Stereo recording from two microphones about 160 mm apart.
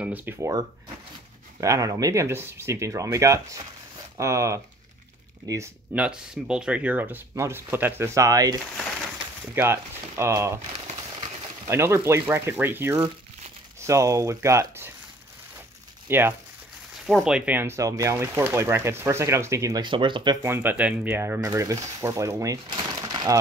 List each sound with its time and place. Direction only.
0.0 s speech: 10° right (ahead or behind)
5.9 s speech: 5° right (ahead or behind)
9.6 s speech: 15° right (ahead or behind)
11.6 s speech: 15° right (ahead or behind)
16.1 s speech: 15° right (ahead or behind); by 20.3 s 30° right (ahead or behind)
20.4 s speech: 15° right (ahead or behind)